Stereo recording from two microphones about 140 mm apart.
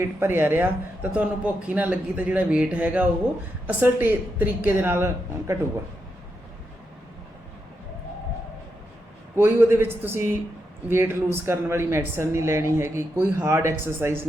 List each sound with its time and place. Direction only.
0.0 s speech: 15° right (ahead or behind)
9.3 s speech: 15° right (ahead or behind)